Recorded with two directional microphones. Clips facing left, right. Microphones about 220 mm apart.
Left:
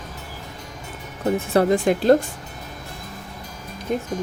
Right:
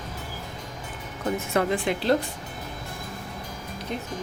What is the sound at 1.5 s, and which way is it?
Speech, 45° left (ahead or behind).